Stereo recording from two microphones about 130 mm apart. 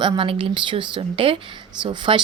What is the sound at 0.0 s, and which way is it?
A woman's voice, 40° right (ahead or behind).